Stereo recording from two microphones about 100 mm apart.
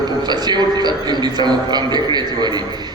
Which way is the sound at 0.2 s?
45° right (ahead or behind).